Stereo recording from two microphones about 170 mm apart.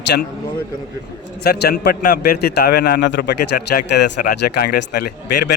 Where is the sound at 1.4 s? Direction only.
70° left (ahead or behind).